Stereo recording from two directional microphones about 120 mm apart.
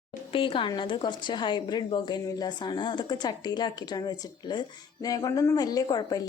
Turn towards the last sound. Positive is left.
turn(degrees=30)  # may be behind; listen again after turning